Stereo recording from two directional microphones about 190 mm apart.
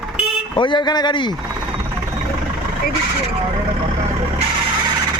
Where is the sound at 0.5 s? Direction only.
25° left (ahead or behind).